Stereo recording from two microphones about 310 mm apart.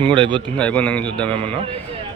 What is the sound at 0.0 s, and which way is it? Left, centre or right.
Speech, centre.